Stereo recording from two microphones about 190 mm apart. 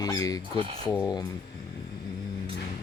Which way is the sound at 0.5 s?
30° right (ahead or behind).